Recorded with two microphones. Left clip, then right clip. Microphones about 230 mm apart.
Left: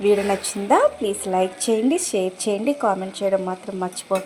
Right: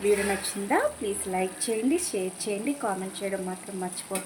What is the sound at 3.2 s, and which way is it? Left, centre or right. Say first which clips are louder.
Speech: left 12 dB; left.